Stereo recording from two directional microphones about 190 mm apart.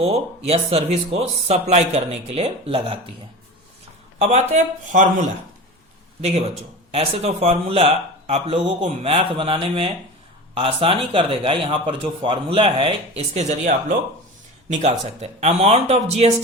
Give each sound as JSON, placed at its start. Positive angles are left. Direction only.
{"t": 0.0, "sound": "speech", "side_deg": -30}
{"t": 4.2, "sound": "speech", "side_deg": -35}
{"t": 6.9, "sound": "a man's voice", "side_deg": -30}